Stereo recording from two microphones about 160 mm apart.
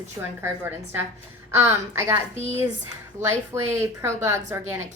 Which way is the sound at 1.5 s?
15° right (ahead or behind).